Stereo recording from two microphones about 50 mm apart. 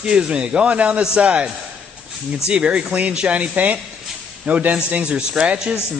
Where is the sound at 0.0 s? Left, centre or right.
Centre.